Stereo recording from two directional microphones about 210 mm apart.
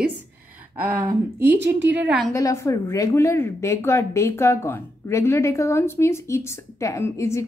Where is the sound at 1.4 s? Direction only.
55° right (ahead or behind).